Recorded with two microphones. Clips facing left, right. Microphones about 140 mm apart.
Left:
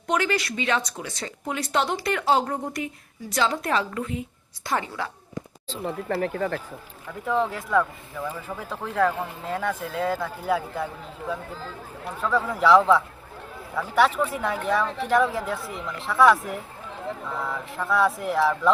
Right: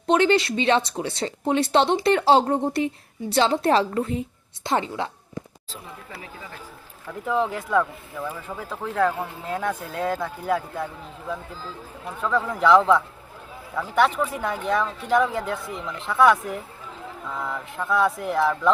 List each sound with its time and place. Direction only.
0.1 s speech: 25° right (ahead or behind)
4.6 s speech: 25° right (ahead or behind)
5.8 s speech: 65° left (ahead or behind)
7.1 s speech: centre (ahead or behind)
12.2 s speech: centre (ahead or behind)